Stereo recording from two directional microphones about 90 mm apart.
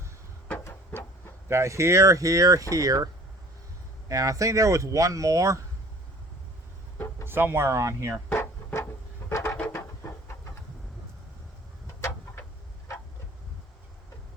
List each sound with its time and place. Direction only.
0.6 s printer: 20° left (ahead or behind)
1.5 s speech: 30° right (ahead or behind)
4.1 s speech: 40° right (ahead or behind)
7.3 s speech: 25° right (ahead or behind)
8.3 s a sound: 30° left (ahead or behind)
11.9 s a sound: 30° left (ahead or behind)